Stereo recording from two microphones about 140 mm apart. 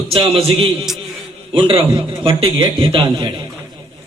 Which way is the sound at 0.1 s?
40° right (ahead or behind).